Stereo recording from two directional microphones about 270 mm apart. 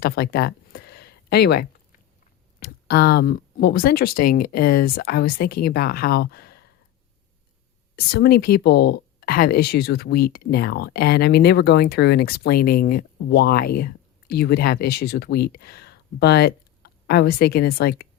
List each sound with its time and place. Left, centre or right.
0.0 s speech: left
7.9 s speech: left